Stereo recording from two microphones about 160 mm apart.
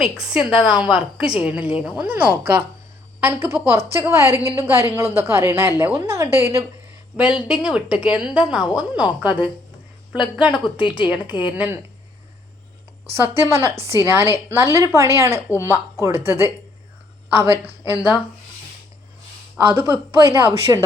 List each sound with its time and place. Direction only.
0.0 s a woman's voice: 5° right (ahead or behind)
7.2 s a woman's voice: 5° right (ahead or behind)
10.8 s speech: 30° left (ahead or behind)
11.3 s a woman's voice: 10° right (ahead or behind)
13.4 s a woman's voice: 15° right (ahead or behind)
17.5 s a woman's voice: 20° left (ahead or behind)
19.6 s a woman's voice: 10° right (ahead or behind)